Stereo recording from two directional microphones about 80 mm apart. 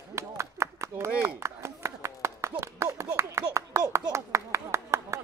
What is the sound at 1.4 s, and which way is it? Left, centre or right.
Chop, right.